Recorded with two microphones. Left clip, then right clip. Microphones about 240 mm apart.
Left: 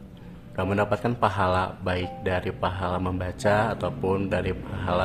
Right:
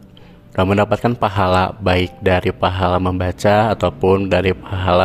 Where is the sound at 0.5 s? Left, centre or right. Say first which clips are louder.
Right 9 dB; right.